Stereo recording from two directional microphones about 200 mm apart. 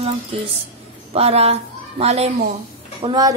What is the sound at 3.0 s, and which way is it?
Speech, 20° right (ahead or behind).